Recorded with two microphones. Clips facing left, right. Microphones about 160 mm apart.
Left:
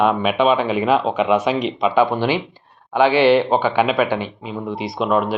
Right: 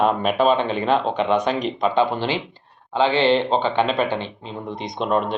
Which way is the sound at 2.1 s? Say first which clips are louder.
Left 4 dB; 15° left (ahead or behind).